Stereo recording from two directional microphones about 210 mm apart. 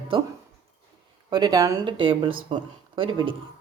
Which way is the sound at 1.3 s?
20° right (ahead or behind).